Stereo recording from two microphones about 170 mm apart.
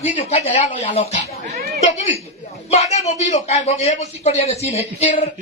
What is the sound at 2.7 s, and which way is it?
Speech, 40° left (ahead or behind).